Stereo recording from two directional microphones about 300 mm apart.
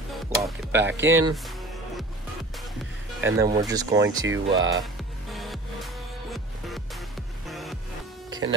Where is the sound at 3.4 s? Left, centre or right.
Centre.